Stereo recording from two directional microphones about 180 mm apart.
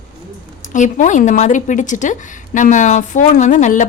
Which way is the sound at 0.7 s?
45° left (ahead or behind).